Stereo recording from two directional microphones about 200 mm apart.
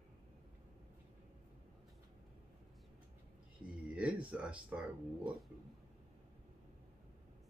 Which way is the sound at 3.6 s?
5° right (ahead or behind).